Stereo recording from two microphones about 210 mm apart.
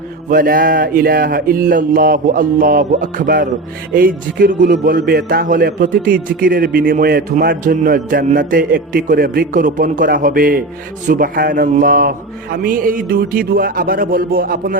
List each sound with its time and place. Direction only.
0.3 s a man's voice: 40° right (ahead or behind)